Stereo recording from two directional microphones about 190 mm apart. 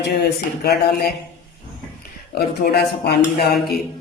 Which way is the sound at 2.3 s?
55° left (ahead or behind).